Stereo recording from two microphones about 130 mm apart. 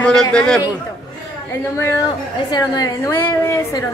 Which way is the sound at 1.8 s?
20° left (ahead or behind).